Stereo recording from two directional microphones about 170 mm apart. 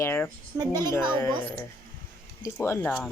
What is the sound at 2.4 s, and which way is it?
Speech, 15° left (ahead or behind).